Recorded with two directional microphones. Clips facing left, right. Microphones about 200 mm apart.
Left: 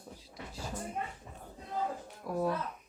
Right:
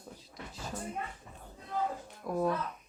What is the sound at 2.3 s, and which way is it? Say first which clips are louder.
Speech: right 1 dB; 5° left (ahead or behind).